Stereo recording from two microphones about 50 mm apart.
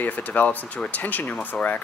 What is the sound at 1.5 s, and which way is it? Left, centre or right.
Speech, centre.